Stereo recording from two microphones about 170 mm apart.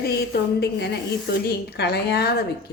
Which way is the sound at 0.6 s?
75° left (ahead or behind).